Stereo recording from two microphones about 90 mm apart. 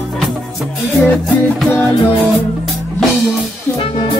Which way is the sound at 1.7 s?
20° left (ahead or behind).